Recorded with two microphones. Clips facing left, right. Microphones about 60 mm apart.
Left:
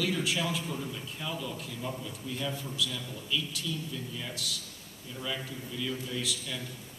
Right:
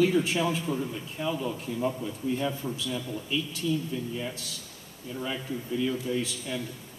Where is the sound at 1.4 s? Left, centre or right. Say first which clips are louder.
Right 7 dB; right.